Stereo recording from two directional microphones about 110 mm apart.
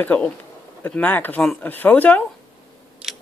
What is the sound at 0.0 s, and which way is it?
Speech, 15° left (ahead or behind).